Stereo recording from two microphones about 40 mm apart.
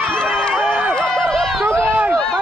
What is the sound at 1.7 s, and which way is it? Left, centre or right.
Run, right.